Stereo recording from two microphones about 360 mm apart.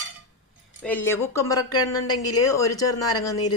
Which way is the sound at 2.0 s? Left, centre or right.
Left.